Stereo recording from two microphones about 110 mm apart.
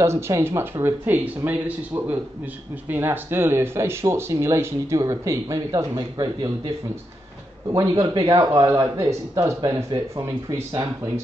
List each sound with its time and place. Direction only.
0.0 s speech: 25° right (ahead or behind)
2.9 s speech: 20° right (ahead or behind)
6.1 s speech: 40° right (ahead or behind)
7.7 s speech: 35° right (ahead or behind)